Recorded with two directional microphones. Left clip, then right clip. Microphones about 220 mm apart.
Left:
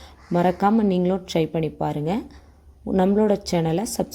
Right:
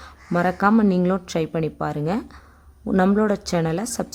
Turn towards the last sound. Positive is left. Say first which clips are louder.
# left 1 dB
turn(degrees=0)  # may be behind; listen again after turning